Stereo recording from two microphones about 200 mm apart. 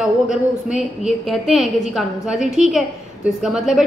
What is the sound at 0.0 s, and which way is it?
A woman's voice, 5° right (ahead or behind).